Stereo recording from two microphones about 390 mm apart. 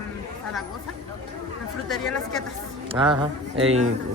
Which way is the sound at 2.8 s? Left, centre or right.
Centre.